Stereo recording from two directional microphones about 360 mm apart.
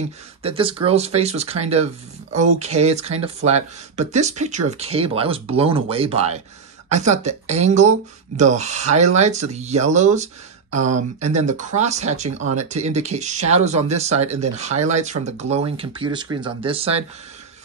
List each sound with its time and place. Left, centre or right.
0.4 s speech: centre